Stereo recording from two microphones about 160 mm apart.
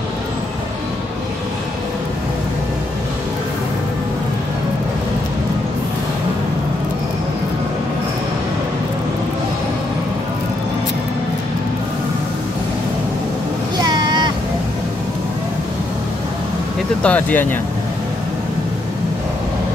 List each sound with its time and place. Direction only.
13.7 s vehicle: 25° right (ahead or behind)
17.0 s speech: 10° left (ahead or behind)